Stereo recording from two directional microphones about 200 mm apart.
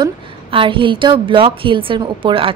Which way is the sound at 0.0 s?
25° right (ahead or behind).